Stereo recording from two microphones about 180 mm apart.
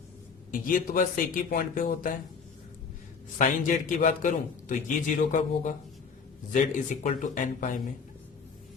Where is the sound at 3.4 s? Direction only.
45° left (ahead or behind).